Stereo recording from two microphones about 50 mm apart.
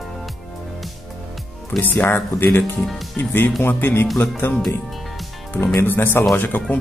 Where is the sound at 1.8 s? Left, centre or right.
Left.